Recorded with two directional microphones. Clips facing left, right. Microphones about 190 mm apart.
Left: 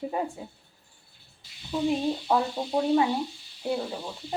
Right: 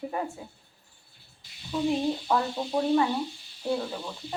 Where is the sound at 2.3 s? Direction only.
15° left (ahead or behind).